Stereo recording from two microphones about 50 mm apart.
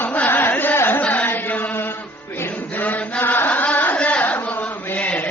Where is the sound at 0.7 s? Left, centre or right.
Left.